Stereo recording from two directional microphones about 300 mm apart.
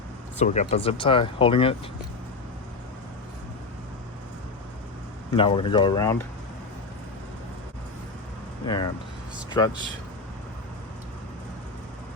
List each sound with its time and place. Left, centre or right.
0.3 s speech: left
5.3 s speech: centre
8.6 s speech: centre